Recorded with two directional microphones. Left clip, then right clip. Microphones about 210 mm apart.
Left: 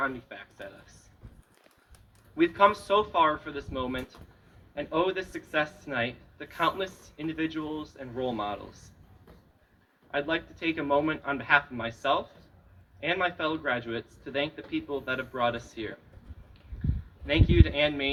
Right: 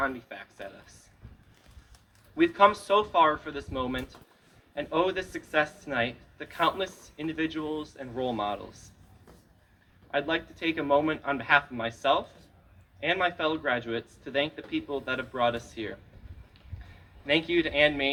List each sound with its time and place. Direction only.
0.0 s a sound: 35° right (ahead or behind)
2.3 s speech: 35° right (ahead or behind)
10.1 s speech: 35° right (ahead or behind)
17.2 s speech: 35° right (ahead or behind)